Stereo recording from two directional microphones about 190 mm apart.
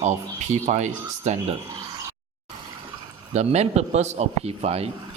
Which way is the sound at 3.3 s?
35° right (ahead or behind).